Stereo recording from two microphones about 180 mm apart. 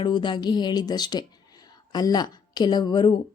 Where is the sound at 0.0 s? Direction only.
25° left (ahead or behind).